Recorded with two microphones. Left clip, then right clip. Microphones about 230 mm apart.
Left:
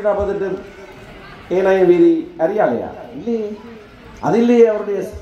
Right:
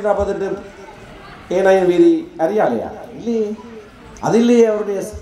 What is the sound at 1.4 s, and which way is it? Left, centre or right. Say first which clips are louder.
A man's voice: even; right.